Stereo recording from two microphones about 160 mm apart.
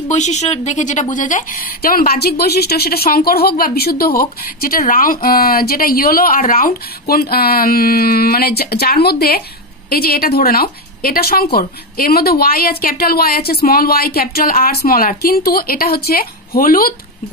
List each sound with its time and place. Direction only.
0.1 s a woman's voice: 45° left (ahead or behind); by 16.9 s 65° left (ahead or behind)